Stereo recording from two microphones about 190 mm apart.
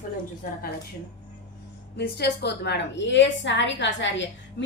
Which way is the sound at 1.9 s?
60° left (ahead or behind).